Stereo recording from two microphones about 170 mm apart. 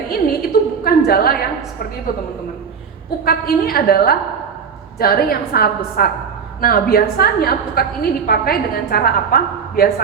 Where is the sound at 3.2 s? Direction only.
60° left (ahead or behind).